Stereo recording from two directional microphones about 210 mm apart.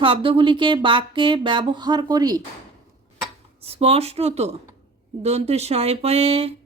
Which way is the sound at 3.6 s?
30° right (ahead or behind).